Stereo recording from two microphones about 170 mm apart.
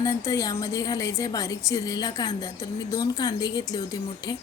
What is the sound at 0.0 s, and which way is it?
A woman's voice, 20° left (ahead or behind).